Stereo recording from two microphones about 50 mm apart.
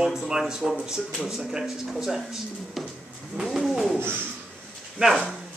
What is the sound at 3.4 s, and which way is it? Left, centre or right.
Bird, centre.